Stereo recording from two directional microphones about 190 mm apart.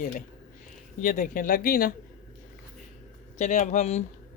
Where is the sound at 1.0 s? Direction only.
45° left (ahead or behind).